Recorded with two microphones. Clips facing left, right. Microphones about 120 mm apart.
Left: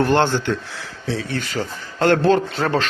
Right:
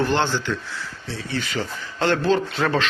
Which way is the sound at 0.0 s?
50° left (ahead or behind).